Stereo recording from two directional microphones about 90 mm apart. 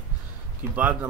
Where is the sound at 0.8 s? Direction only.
15° right (ahead or behind).